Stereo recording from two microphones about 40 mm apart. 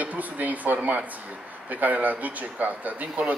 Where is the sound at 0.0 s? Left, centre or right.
Right.